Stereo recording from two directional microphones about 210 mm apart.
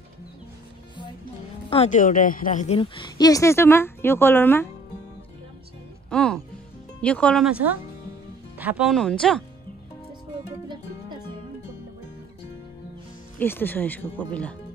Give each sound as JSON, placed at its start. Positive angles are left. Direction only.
{"t": 1.7, "sound": "a woman's voice", "side_deg": 35}
{"t": 6.0, "sound": "speech", "side_deg": 5}
{"t": 8.5, "sound": "speech", "side_deg": -5}
{"t": 13.4, "sound": "speech", "side_deg": 10}